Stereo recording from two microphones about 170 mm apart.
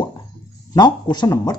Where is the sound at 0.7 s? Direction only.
25° left (ahead or behind).